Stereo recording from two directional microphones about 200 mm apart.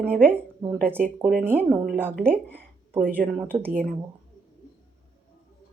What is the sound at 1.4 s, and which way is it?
Speech, 10° right (ahead or behind).